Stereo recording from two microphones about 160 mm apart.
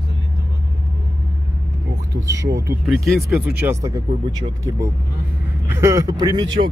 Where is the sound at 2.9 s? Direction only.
Centre (ahead or behind).